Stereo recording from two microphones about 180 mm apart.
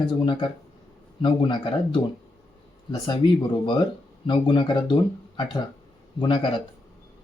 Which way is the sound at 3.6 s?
25° left (ahead or behind).